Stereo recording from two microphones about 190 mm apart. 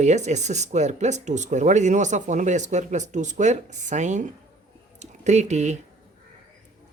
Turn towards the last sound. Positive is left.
turn(degrees=-40)  # may be behind; listen again after turning